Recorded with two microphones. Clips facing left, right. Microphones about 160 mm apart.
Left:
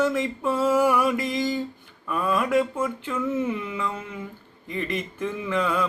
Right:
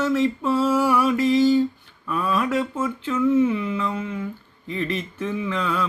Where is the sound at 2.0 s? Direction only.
5° left (ahead or behind).